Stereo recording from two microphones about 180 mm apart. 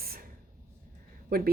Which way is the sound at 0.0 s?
55° right (ahead or behind).